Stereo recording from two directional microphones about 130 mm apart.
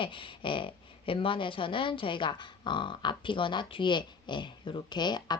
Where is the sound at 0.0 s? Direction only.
40° left (ahead or behind).